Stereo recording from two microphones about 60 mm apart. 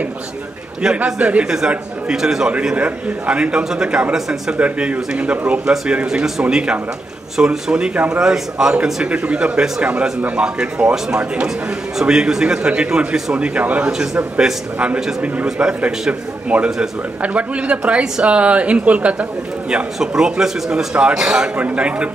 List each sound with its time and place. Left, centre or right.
0.9 s a man's voice: centre
2.7 s a man's voice: centre
15.4 s a man's voice: centre
15.8 s speech: right
19.7 s a man's voice: centre
21.2 s a man's voice: centre
21.5 s speech: right